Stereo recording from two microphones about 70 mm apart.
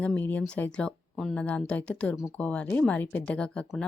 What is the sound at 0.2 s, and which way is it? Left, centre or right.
Speech, left.